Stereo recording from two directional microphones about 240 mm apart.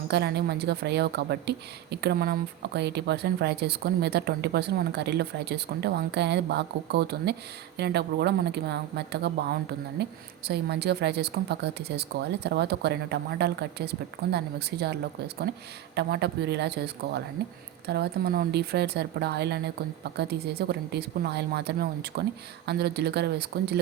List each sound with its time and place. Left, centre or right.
0.1 s a woman's voice: right